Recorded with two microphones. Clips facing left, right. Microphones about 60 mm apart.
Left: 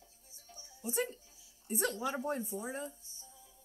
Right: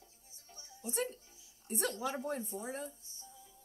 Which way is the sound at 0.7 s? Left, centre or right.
Centre.